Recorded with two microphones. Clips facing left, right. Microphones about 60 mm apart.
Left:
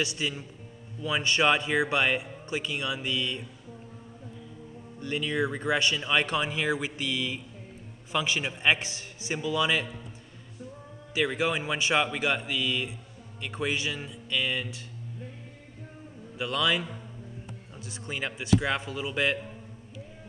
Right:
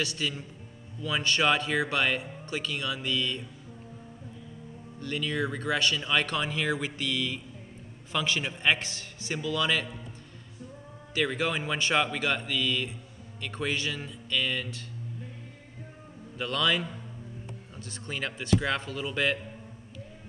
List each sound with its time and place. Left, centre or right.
0.0 s speech: centre
5.0 s speech: centre
11.1 s speech: centre
16.3 s speech: centre